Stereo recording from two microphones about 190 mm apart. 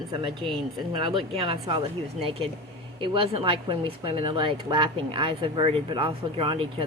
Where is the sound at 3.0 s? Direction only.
25° right (ahead or behind).